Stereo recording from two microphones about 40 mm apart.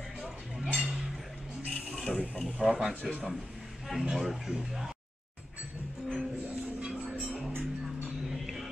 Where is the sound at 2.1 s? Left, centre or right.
Centre.